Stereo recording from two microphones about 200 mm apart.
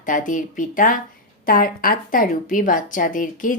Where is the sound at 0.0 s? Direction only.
40° left (ahead or behind).